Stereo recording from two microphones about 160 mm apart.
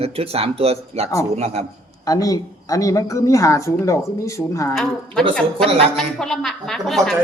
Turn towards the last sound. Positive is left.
turn(degrees=0)  # may be behind; listen again after turning